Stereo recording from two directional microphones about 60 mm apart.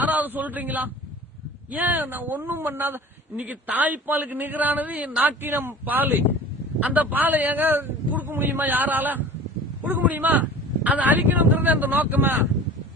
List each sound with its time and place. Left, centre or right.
0.0 s a sound: right
1.7 s speech: right
3.3 s a man's voice: right
5.4 s a man's voice: right